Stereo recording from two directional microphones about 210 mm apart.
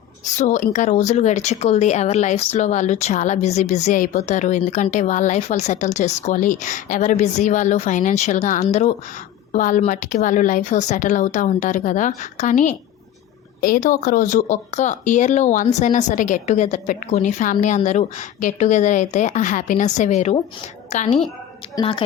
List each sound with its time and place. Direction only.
0.3 s a woman's voice: 35° left (ahead or behind)